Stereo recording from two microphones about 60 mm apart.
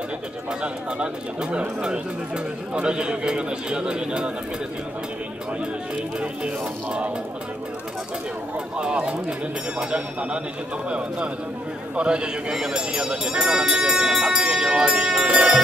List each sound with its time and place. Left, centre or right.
0.6 s speech: centre
6.1 s speech: centre
8.7 s speech: centre
15.2 s music: centre